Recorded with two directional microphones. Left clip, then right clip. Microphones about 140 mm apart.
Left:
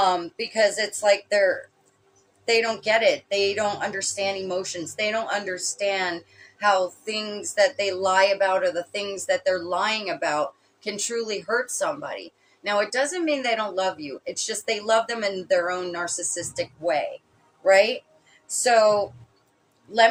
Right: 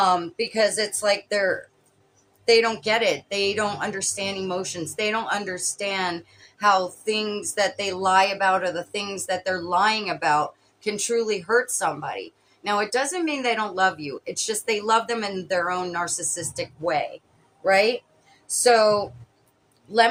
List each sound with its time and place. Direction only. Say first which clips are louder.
0.0 s speech: right 1 dB; 25° right (ahead or behind)